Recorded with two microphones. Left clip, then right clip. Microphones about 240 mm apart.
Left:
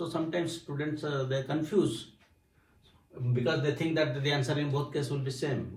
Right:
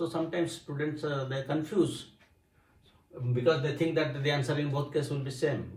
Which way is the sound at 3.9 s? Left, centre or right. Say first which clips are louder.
Even; centre.